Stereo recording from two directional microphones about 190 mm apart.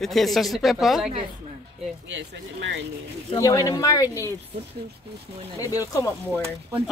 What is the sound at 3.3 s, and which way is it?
Speech, 15° left (ahead or behind).